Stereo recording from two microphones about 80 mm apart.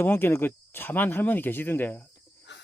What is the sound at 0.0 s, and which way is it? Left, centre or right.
Speech, left.